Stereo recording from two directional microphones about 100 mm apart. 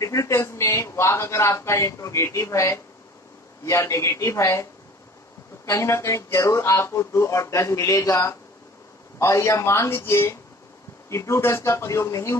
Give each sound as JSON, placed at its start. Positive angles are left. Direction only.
{"t": 0.0, "sound": "a man's voice", "side_deg": 30}
{"t": 5.7, "sound": "speech", "side_deg": 30}